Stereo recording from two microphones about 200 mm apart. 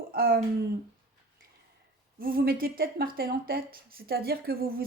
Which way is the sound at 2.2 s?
45° right (ahead or behind).